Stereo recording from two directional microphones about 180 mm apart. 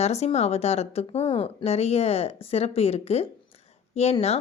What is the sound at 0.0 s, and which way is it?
Speech, 35° left (ahead or behind).